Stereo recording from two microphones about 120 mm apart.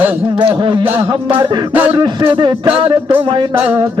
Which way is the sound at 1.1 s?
40° right (ahead or behind).